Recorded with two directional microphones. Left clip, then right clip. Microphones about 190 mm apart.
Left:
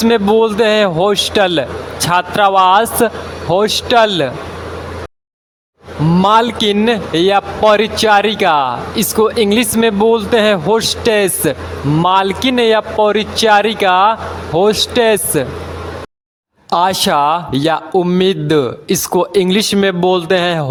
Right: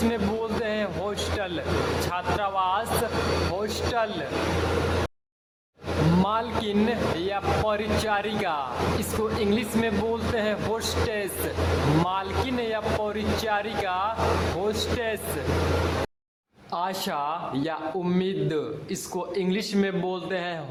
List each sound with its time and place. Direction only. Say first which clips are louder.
0.1 s a man's voice: left 17 dB; 50° left (ahead or behind)
6.2 s a man's voice: left 16 dB; 50° left (ahead or behind)
16.7 s a man's voice: left 16 dB; 55° left (ahead or behind)